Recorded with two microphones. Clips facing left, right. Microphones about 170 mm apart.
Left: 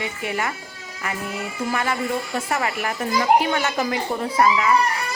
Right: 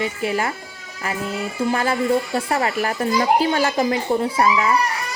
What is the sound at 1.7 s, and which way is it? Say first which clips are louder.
Speech: right 5 dB; 30° right (ahead or behind).